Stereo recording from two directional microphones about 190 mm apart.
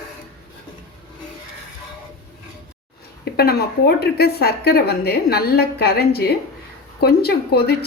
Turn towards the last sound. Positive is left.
turn(degrees=55)  # may be behind; listen again after turning